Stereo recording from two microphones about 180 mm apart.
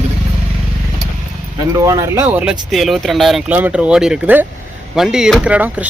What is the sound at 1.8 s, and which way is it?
Speech, 15° right (ahead or behind).